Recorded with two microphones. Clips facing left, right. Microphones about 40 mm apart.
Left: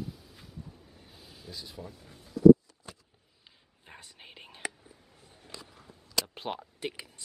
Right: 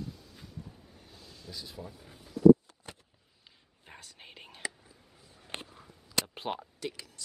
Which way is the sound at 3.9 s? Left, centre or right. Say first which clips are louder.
Even; centre.